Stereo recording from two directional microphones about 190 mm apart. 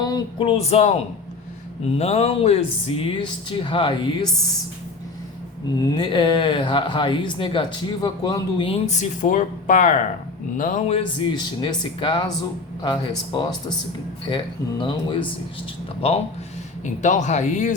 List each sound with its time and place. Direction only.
0.0 s speech: 25° left (ahead or behind)
5.8 s speech: 20° left (ahead or behind)
16.8 s speech: 40° left (ahead or behind)